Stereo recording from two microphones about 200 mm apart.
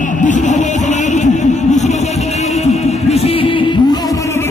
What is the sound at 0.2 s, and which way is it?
Music, 40° left (ahead or behind).